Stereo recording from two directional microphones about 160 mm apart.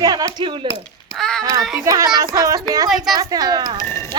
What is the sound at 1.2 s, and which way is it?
Speech, 5° left (ahead or behind).